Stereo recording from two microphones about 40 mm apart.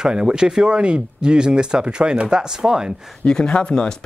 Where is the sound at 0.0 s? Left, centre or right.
Centre.